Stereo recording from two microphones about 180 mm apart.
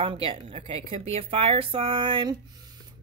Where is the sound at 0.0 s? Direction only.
30° right (ahead or behind).